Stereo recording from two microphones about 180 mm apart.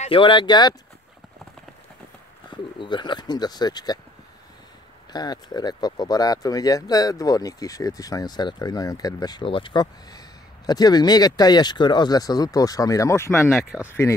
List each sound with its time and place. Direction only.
0.0 s speech: 30° left (ahead or behind)
2.8 s speech: 25° left (ahead or behind)
5.1 s speech: 20° left (ahead or behind)
13.7 s speech: 5° right (ahead or behind)